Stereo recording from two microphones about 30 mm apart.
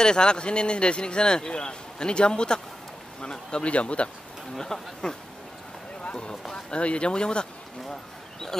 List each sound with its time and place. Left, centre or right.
0.0 s speech: left
4.7 s speech: left
6.5 s speech: left
7.9 s a sound: centre